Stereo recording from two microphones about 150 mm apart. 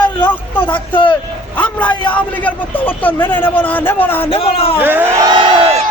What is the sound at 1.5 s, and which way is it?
A man's voice, 10° left (ahead or behind).